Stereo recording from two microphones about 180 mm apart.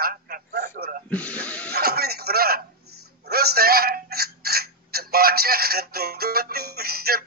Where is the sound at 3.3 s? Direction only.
60° right (ahead or behind).